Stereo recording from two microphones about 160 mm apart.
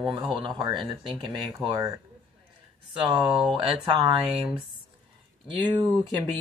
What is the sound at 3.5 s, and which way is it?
Speech, 30° right (ahead or behind).